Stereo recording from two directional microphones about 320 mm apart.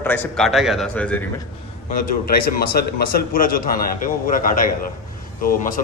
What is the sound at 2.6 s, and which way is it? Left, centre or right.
A man's voice, left.